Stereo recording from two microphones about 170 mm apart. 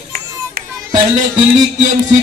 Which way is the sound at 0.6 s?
65° right (ahead or behind).